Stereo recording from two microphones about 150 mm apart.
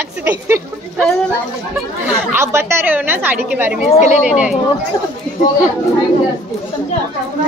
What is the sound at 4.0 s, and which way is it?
Speech, 50° left (ahead or behind).